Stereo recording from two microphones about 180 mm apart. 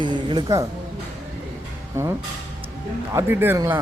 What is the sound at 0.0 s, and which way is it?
Music, 25° right (ahead or behind).